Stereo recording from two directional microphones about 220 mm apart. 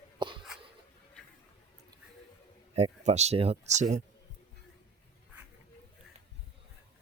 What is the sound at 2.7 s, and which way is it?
Speech, 30° right (ahead or behind).